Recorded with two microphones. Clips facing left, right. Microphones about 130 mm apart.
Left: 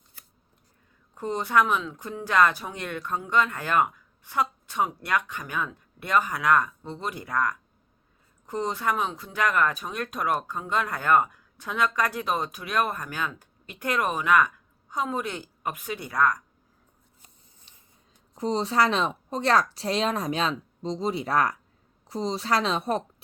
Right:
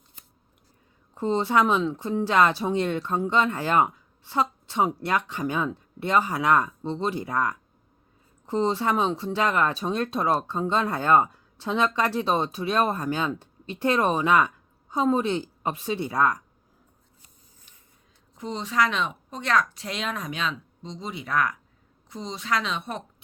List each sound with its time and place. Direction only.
1.2 s speech: 25° right (ahead or behind)
18.3 s speech: 35° left (ahead or behind)